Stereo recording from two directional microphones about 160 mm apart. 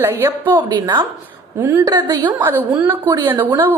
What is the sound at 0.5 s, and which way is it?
A woman's voice, 30° right (ahead or behind).